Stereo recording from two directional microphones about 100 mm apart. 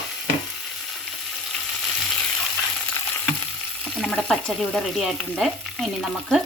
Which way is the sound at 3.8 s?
5° left (ahead or behind).